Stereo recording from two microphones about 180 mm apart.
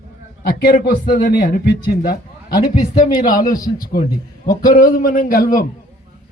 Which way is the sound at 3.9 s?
55° left (ahead or behind).